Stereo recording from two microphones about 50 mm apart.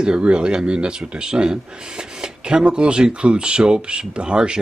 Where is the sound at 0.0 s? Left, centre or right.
Centre.